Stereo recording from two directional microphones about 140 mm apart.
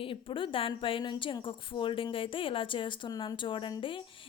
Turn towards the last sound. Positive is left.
turn(degrees=40)  # may be behind; listen again after turning